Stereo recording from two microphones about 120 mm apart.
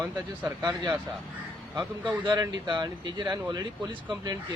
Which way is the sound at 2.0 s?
35° right (ahead or behind).